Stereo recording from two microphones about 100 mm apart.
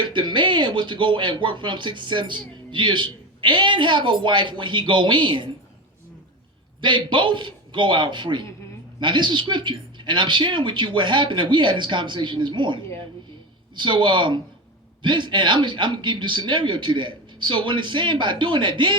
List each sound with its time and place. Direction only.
0.0 s speech: 55° right (ahead or behind)
6.8 s speech: 55° right (ahead or behind)